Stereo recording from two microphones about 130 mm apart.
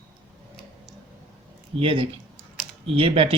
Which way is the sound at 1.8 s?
45° right (ahead or behind).